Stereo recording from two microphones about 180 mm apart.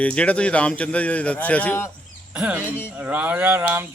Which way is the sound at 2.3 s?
10° right (ahead or behind).